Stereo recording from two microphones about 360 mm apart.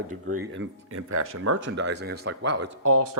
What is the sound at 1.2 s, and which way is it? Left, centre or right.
Speech, right.